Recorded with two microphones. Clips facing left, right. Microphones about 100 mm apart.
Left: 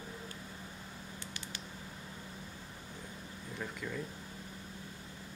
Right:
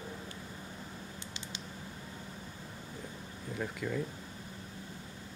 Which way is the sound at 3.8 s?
15° right (ahead or behind).